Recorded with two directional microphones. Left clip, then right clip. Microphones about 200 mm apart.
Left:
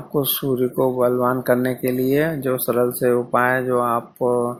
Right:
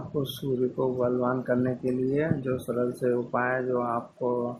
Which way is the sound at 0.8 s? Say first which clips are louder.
Left 10 dB; 20° left (ahead or behind).